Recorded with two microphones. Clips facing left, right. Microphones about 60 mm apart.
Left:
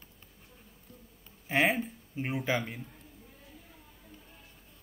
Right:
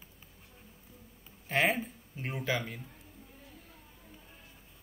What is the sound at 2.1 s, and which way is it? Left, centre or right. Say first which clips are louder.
Speech: left 5 dB; centre.